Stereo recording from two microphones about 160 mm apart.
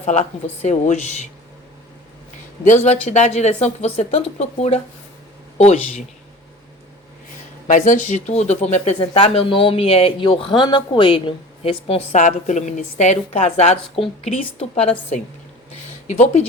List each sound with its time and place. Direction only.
0.0 s a woman's voice: 45° left (ahead or behind)
2.6 s a woman's voice: 45° left (ahead or behind)
7.7 s speech: 50° left (ahead or behind); by 12.0 s 35° left (ahead or behind)
12.1 s a woman's voice: 50° left (ahead or behind)
16.0 s a woman's voice: 45° left (ahead or behind)